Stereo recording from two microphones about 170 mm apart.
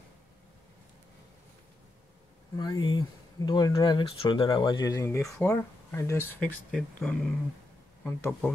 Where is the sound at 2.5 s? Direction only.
25° left (ahead or behind).